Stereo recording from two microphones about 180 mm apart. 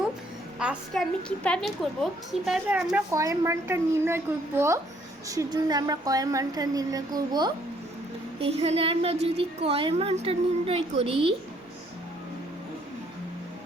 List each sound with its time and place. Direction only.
0.6 s a woman's voice: 5° right (ahead or behind)
2.7 s a woman's voice: 15° right (ahead or behind)
8.4 s a woman's voice: 35° right (ahead or behind)